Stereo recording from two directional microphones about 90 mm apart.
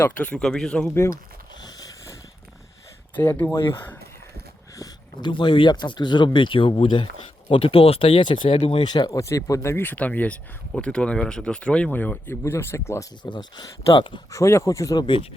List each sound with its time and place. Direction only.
0.0 s speech: 15° left (ahead or behind)
3.2 s speech: 25° left (ahead or behind)
5.2 s speech: 60° left (ahead or behind)
7.5 s speech: 90° left
8.8 s speech: 50° left (ahead or behind)
9.1 s speech: 35° left (ahead or behind)
13.2 s speech: 60° left (ahead or behind)
14.3 s speech: 35° left (ahead or behind)
14.9 s speech: 65° left (ahead or behind)